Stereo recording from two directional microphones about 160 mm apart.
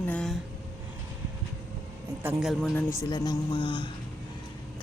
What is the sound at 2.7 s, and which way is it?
Speech, 20° left (ahead or behind).